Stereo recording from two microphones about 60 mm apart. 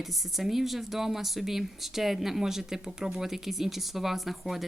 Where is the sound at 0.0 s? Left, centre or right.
Centre.